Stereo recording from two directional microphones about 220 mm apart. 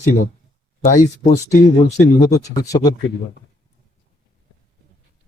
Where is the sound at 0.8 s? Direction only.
35° left (ahead or behind).